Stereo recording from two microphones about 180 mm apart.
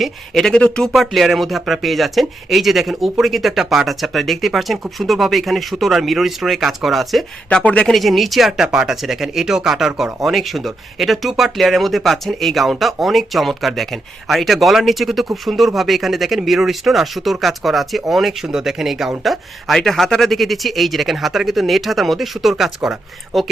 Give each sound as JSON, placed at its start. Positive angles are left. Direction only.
{"t": 0.0, "sound": "speech", "side_deg": 0}